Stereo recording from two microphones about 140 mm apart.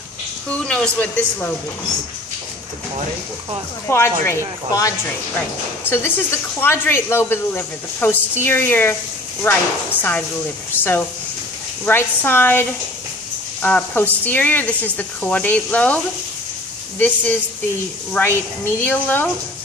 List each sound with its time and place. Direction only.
0.5 s speech: 5° left (ahead or behind)
3.8 s speech: 15° left (ahead or behind)
10.7 s speech: 15° left (ahead or behind)
17.0 s speech: 10° left (ahead or behind)